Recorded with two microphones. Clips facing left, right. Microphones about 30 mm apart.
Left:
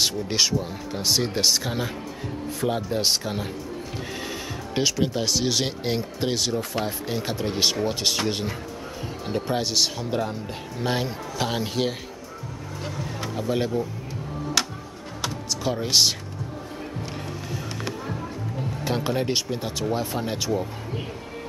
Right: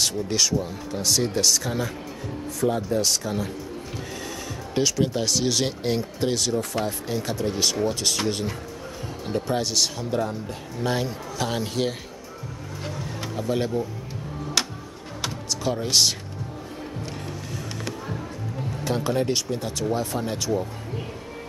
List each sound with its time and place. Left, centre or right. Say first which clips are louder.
0.0 s speech: left 1 dB; left
4.7 s speech: right 1 dB; centre
12.8 s music: left 1 dB; centre
15.6 s speech: even; centre
17.5 s music: left 2 dB; centre
18.9 s speech: right 1 dB; centre